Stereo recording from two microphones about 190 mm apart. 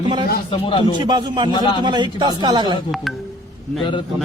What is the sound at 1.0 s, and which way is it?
Speech, 25° right (ahead or behind).